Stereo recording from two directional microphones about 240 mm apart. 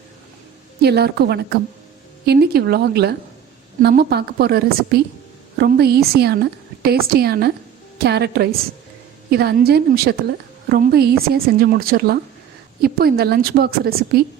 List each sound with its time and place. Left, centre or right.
0.8 s a woman's voice: right